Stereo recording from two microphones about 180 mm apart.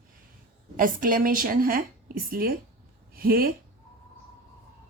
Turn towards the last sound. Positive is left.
turn(degrees=-55)  # may be behind; listen again after turning